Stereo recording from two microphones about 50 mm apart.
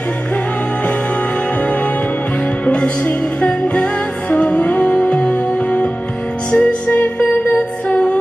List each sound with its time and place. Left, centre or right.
2.6 s music: left